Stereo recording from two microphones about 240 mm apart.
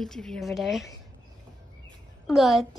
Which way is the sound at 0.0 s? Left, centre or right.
Centre.